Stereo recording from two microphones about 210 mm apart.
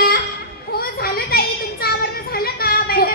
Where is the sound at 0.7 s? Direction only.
45° left (ahead or behind).